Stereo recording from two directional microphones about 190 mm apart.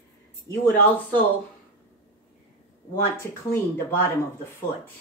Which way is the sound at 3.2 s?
10° left (ahead or behind).